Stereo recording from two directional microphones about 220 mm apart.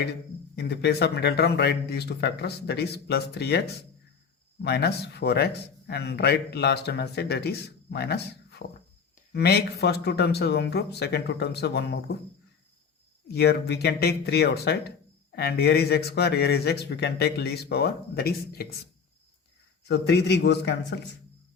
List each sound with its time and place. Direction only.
0.5 s speech: 50° left (ahead or behind)
4.6 s speech: 50° left (ahead or behind)
13.2 s speech: 50° left (ahead or behind)
19.9 s speech: 50° left (ahead or behind)